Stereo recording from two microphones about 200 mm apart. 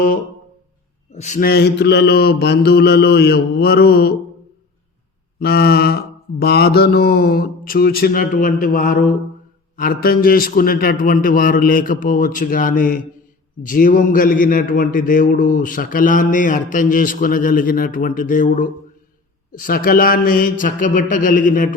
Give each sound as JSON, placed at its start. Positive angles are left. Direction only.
{"t": 1.1, "sound": "a man's voice", "side_deg": 35}
{"t": 1.4, "sound": "a man's voice", "side_deg": 55}
{"t": 5.4, "sound": "a man's voice", "side_deg": 55}